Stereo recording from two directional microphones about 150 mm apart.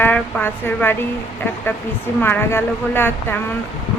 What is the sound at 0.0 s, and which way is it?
Speech, 10° left (ahead or behind).